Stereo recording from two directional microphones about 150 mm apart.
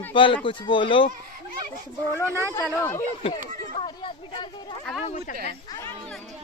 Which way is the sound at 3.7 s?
30° left (ahead or behind).